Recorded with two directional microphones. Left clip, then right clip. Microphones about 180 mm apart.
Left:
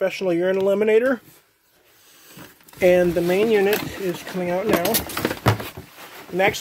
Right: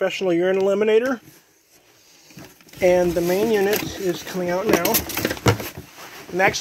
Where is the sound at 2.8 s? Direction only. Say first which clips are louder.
Left 1 dB; 25° left (ahead or behind).